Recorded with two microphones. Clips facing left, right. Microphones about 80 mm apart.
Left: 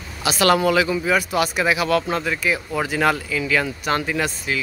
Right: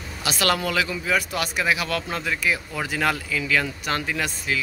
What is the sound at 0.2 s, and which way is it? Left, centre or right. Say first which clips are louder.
Speech: left 6 dB; centre.